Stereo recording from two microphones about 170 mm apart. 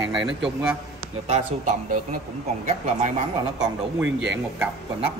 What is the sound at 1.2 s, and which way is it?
Speech, 45° right (ahead or behind).